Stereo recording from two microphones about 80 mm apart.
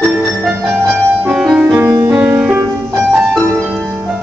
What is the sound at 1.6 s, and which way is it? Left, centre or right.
Music, right.